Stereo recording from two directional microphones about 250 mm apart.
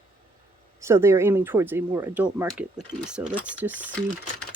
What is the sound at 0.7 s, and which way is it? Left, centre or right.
Speech, centre.